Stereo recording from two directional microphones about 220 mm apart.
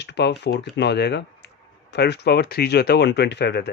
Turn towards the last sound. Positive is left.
turn(degrees=50)  # may be behind; listen again after turning